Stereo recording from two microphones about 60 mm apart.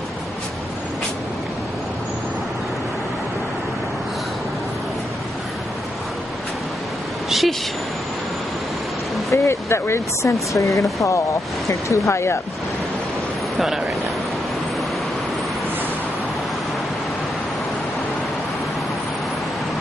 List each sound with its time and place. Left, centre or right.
7.2 s vehicle: centre
9.3 s speech: left
13.6 s speech: centre